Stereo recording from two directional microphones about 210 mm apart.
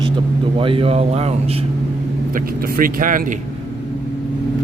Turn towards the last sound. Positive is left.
turn(degrees=-40)  # may be behind; listen again after turning